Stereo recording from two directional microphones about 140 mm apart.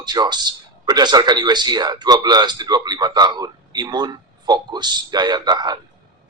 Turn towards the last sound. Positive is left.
turn(degrees=-30)  # may be behind; listen again after turning